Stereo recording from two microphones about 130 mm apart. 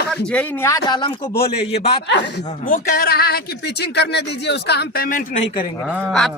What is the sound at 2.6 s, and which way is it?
Speech, 90° left.